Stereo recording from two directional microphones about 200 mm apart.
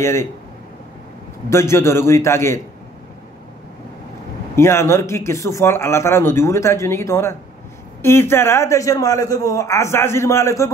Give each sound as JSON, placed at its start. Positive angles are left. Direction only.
{"t": 0.0, "sound": "speech", "side_deg": 15}
{"t": 1.5, "sound": "speech", "side_deg": 15}
{"t": 4.6, "sound": "speech", "side_deg": 15}